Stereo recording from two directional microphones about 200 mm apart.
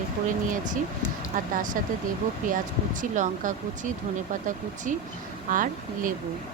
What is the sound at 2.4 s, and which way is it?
Speech, 40° right (ahead or behind).